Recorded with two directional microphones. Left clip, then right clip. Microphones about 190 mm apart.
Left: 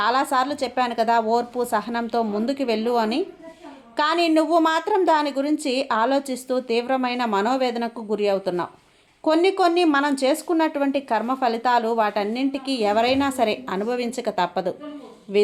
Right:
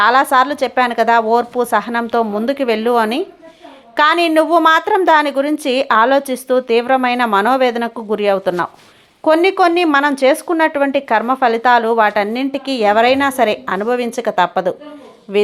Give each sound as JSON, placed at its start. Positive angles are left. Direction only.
{"t": 0.0, "sound": "a woman's voice", "side_deg": -15}